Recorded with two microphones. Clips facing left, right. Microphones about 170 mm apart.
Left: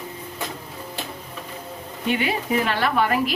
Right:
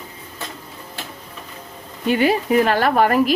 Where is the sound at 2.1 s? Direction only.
40° right (ahead or behind).